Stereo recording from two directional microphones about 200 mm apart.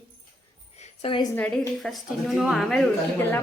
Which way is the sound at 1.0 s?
25° left (ahead or behind).